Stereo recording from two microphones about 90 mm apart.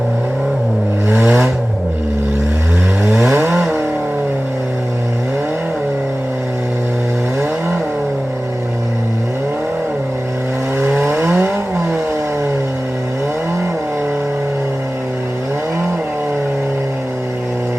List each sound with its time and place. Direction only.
1.2 s vehicle: 5° right (ahead or behind)
3.3 s vehicle: 20° right (ahead or behind)
10.8 s vehicle: 25° right (ahead or behind)